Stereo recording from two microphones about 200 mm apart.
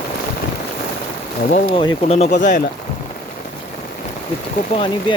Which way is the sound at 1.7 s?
25° left (ahead or behind).